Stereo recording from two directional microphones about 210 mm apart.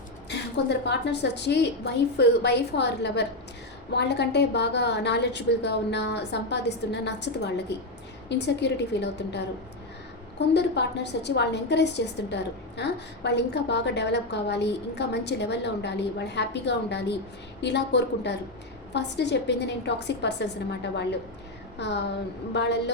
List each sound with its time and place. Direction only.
0.3 s a woman's voice: 55° left (ahead or behind)